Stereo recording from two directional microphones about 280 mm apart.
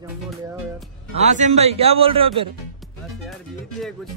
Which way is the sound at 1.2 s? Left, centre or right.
Right.